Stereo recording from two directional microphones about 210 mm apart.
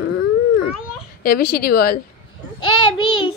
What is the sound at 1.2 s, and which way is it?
Speech, 45° left (ahead or behind).